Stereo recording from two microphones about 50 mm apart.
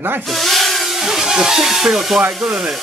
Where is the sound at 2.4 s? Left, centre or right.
Centre.